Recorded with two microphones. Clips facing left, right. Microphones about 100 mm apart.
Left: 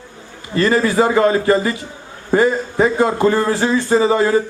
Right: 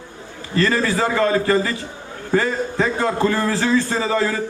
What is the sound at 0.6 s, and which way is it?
A man's voice, 20° left (ahead or behind).